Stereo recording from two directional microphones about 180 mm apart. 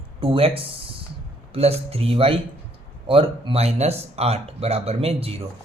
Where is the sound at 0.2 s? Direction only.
30° right (ahead or behind).